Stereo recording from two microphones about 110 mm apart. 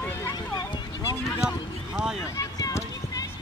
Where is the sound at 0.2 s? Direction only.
40° left (ahead or behind).